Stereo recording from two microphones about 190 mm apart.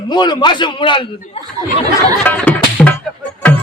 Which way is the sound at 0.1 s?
20° left (ahead or behind).